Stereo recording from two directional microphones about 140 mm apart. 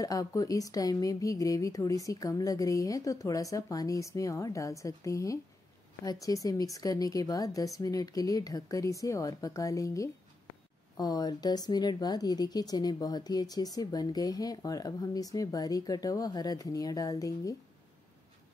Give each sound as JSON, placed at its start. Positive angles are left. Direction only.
{"t": 0.0, "sound": "speech", "side_deg": 25}